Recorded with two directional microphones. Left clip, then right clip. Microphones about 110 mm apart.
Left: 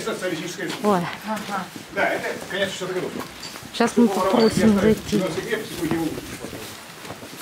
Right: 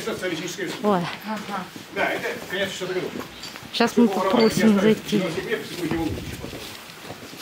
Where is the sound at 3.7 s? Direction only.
5° right (ahead or behind).